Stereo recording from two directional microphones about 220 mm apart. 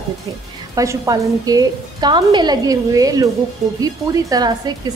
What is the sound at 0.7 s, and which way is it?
A woman's voice, 15° right (ahead or behind).